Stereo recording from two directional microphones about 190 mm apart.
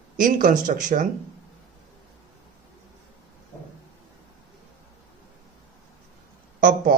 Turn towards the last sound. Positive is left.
turn(degrees=-45)  # may be behind; listen again after turning